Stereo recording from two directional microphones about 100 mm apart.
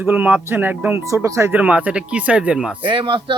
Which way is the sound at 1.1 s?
30° right (ahead or behind).